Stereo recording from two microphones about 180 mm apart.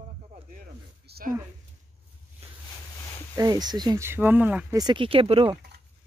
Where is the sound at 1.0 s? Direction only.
60° right (ahead or behind).